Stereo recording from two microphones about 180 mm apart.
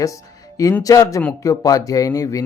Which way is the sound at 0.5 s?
20° left (ahead or behind).